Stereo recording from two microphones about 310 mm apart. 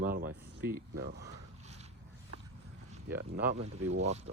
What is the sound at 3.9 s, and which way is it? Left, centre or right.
Speech, right.